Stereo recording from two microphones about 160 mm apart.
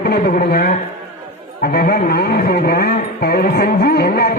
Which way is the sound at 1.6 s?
80° left.